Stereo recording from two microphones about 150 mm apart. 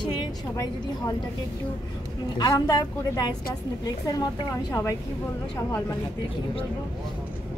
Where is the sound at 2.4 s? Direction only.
25° left (ahead or behind).